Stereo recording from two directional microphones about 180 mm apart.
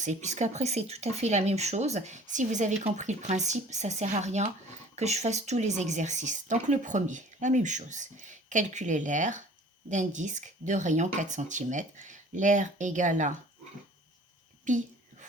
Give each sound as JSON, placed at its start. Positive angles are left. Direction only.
{"t": 0.0, "sound": "speech", "side_deg": -40}
{"t": 14.7, "sound": "a child's voice", "side_deg": -45}